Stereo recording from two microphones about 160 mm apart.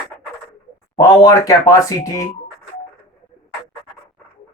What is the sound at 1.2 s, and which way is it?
Speech, 20° left (ahead or behind).